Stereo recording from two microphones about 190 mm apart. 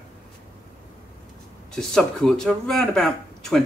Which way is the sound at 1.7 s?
5° left (ahead or behind).